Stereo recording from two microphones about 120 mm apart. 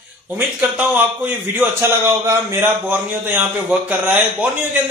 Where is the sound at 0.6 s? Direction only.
15° right (ahead or behind).